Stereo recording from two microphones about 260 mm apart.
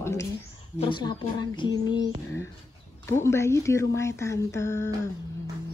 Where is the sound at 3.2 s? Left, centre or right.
Centre.